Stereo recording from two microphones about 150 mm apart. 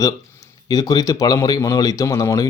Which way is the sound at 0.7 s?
25° left (ahead or behind).